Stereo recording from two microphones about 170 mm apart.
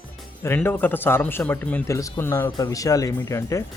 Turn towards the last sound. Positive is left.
turn(degrees=20)  # may be behind; listen again after turning